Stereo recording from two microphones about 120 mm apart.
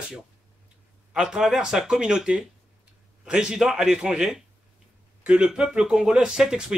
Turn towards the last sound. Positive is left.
turn(degrees=-5)  # may be behind; listen again after turning